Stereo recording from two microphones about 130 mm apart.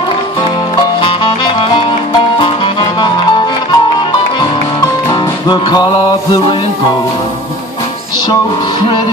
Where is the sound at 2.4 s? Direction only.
40° left (ahead or behind).